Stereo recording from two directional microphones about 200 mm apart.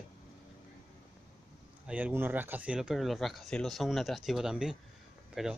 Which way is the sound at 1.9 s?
5° right (ahead or behind).